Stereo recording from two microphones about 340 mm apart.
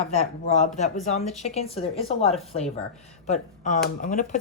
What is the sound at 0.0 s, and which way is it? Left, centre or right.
Speech, centre.